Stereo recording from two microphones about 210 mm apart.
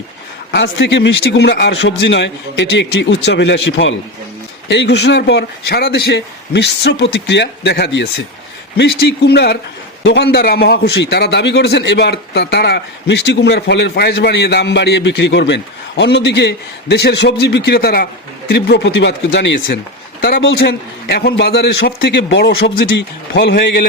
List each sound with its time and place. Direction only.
0.5 s a man's voice: 55° left (ahead or behind)